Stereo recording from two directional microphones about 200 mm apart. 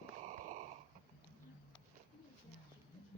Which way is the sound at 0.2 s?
35° right (ahead or behind).